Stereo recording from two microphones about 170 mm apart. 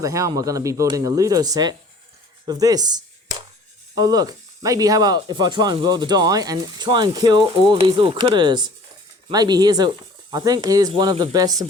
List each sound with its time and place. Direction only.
0.0 s speech: 20° right (ahead or behind)